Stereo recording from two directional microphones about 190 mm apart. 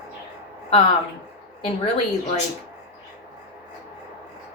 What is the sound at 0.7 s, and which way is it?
Speech, 30° left (ahead or behind).